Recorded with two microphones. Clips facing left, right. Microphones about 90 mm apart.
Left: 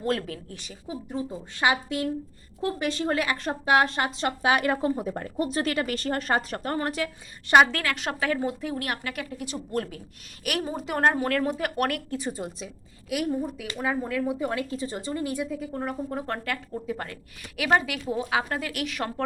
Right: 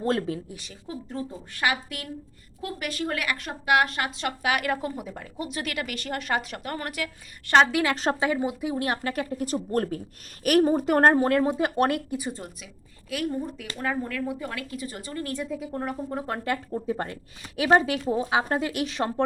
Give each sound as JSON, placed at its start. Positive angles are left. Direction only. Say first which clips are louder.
{"t": 0.0, "sound": "a woman's voice", "louder": "right 2 dB", "side_deg": -30}
{"t": 0.4, "sound": "speech", "louder": "even", "side_deg": 0}
{"t": 0.9, "sound": "a woman's voice", "louder": "left 2 dB", "side_deg": 15}
{"t": 5.0, "sound": "speech", "louder": "left 6 dB", "side_deg": 45}
{"t": 7.7, "sound": "speech", "louder": "right 5 dB", "side_deg": -15}
{"t": 8.9, "sound": "a woman's voice", "louder": "right 4 dB", "side_deg": -35}
{"t": 11.3, "sound": "a woman's voice", "louder": "right 3 dB", "side_deg": -20}
{"t": 12.4, "sound": "a woman's voice", "louder": "left 6 dB", "side_deg": 15}
{"t": 13.3, "sound": "a woman's voice", "louder": "left 2 dB", "side_deg": 5}
{"t": 15.4, "sound": "speech", "louder": "even", "side_deg": 0}
{"t": 16.4, "sound": "a woman's voice", "louder": "right 4 dB", "side_deg": -25}